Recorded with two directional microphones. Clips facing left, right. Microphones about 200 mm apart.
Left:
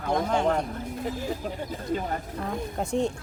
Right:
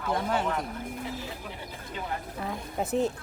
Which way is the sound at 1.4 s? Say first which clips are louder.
Left 10 dB; 45° left (ahead or behind).